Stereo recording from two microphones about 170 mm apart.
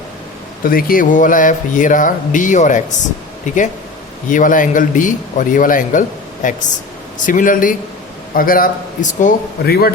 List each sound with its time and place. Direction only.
0.6 s a man's voice: 55° left (ahead or behind)